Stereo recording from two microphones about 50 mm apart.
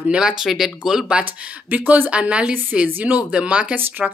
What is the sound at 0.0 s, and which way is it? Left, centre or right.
Speech, centre.